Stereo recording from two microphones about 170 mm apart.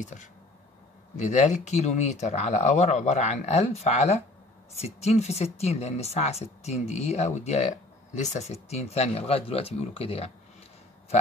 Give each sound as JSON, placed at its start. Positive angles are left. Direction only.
{"t": 0.0, "sound": "speech", "side_deg": 45}